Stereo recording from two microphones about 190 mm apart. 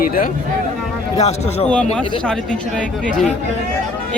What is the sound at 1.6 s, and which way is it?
Speech, 5° left (ahead or behind).